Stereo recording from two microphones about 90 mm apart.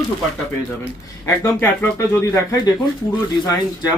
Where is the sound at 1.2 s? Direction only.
25° left (ahead or behind).